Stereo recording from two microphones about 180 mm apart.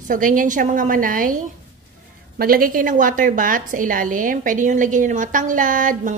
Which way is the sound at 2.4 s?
55° right (ahead or behind).